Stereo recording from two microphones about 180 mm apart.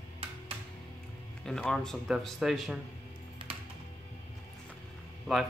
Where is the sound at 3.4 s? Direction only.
25° right (ahead or behind).